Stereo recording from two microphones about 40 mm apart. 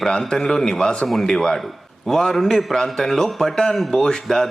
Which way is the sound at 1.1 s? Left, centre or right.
Centre.